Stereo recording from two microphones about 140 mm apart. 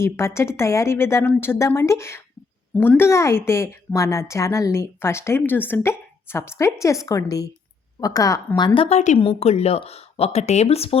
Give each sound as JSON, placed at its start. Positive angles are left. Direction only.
{"t": 0.0, "sound": "a woman's voice", "side_deg": 20}
{"t": 8.5, "sound": "speech", "side_deg": 35}